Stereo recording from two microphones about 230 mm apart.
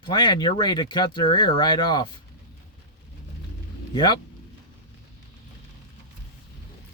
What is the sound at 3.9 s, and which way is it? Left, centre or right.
Speech, centre.